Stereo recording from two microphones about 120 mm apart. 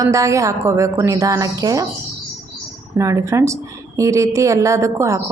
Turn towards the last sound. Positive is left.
turn(degrees=-25)  # may be behind; listen again after turning